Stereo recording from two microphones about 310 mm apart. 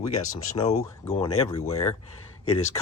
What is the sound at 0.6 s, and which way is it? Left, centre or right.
Speech, centre.